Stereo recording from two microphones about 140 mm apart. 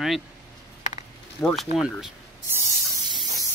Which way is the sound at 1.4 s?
10° left (ahead or behind).